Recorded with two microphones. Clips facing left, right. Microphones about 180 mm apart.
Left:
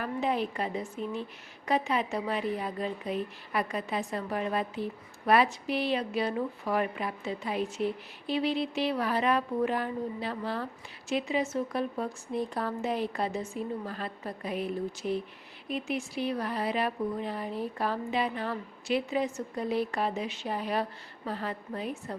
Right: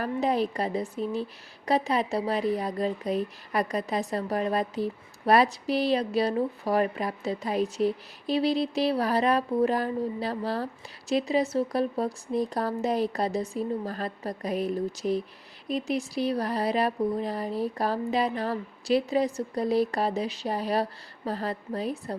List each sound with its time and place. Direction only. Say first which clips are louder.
0.0 s a woman's voice: right 4 dB; 40° right (ahead or behind)